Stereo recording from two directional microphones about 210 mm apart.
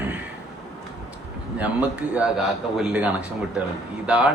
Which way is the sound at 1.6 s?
5° right (ahead or behind).